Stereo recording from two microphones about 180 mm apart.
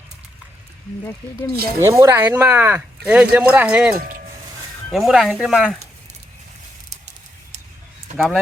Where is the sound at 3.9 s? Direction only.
50° right (ahead or behind).